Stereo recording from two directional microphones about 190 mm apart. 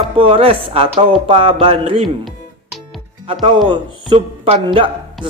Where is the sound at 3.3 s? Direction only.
25° right (ahead or behind).